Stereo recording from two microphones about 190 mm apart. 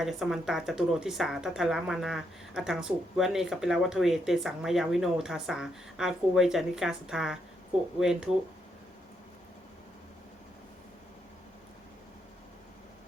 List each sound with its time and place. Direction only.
0.0 s speech: centre (ahead or behind)